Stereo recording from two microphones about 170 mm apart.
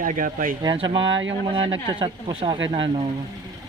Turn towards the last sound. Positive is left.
turn(degrees=-30)  # may be behind; listen again after turning